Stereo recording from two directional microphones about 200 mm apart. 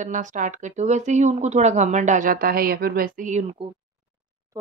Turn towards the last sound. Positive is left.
turn(degrees=-40)  # may be behind; listen again after turning